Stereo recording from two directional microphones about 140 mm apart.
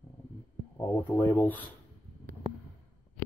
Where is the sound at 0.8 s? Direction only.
20° left (ahead or behind).